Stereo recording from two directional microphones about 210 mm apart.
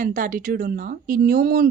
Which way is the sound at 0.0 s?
40° right (ahead or behind).